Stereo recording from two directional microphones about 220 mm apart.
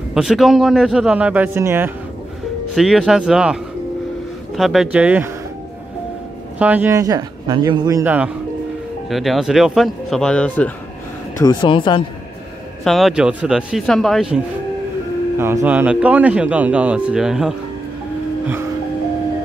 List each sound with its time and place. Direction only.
0.1 s speech: centre (ahead or behind)
4.6 s speech: centre (ahead or behind)
6.6 s a man's voice: 10° right (ahead or behind)
11.3 s speech: 20° left (ahead or behind)
12.8 s speech: centre (ahead or behind)